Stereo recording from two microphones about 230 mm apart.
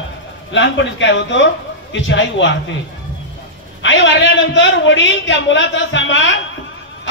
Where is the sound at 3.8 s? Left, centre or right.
Left.